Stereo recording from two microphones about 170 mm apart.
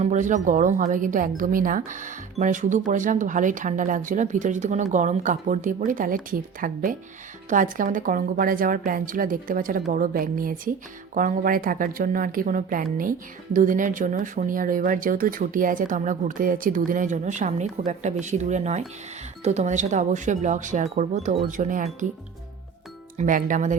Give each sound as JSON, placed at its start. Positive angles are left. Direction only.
{"t": 0.0, "sound": "speech", "side_deg": -45}
{"t": 23.1, "sound": "speech", "side_deg": -50}